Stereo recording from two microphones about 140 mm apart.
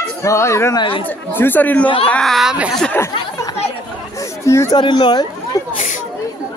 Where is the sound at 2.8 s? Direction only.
15° left (ahead or behind).